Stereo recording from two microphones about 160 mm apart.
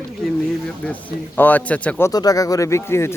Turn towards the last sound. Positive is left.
turn(degrees=15)  # may be behind; listen again after turning